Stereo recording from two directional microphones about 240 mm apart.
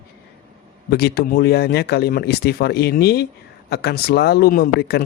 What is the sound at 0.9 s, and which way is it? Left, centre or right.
Speech, left.